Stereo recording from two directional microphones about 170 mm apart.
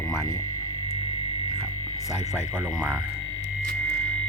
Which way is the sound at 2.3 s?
5° right (ahead or behind).